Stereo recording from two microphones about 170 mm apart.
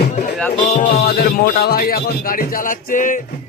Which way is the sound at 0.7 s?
55° left (ahead or behind).